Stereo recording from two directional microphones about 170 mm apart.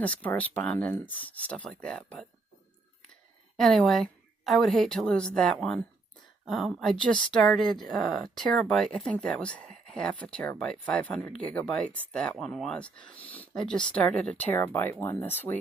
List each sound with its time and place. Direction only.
0.0 s a woman's voice: 10° left (ahead or behind)
3.5 s a woman's voice: centre (ahead or behind)